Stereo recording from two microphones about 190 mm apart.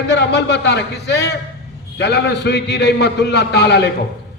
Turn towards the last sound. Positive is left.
turn(degrees=60)  # may be behind; listen again after turning